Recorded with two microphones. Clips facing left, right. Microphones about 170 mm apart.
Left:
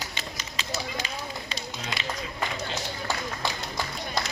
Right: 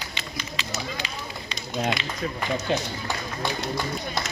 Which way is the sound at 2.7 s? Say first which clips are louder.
Right 9 dB; 60° right (ahead or behind).